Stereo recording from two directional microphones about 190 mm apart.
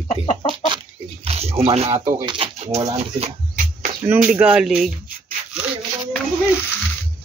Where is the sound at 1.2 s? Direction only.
30° right (ahead or behind).